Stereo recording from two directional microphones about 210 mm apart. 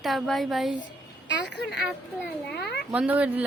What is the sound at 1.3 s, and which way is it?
A child's voice, 55° left (ahead or behind).